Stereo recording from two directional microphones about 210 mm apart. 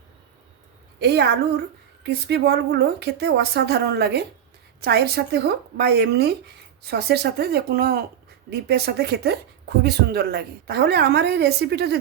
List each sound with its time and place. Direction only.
0.9 s speech: 50° right (ahead or behind)